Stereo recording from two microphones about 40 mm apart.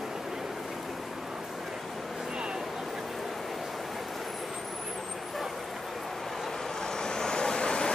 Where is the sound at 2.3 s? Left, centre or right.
Centre.